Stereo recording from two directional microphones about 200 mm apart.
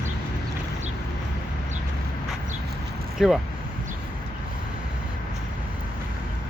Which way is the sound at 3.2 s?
Centre (ahead or behind).